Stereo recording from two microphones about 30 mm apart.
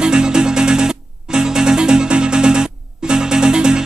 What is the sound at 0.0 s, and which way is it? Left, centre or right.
Music, right.